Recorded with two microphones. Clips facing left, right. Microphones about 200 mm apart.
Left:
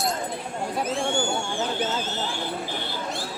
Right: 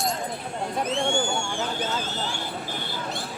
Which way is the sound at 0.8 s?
5° left (ahead or behind).